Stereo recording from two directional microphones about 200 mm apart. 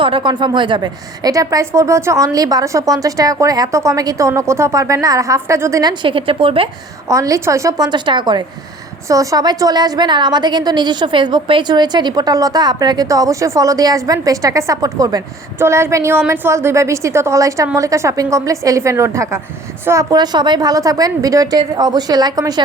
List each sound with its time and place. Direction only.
0.0 s a woman's voice: 25° right (ahead or behind)
7.1 s a woman's voice: 15° right (ahead or behind)